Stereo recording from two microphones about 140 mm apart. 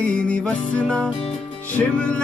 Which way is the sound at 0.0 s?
10° left (ahead or behind).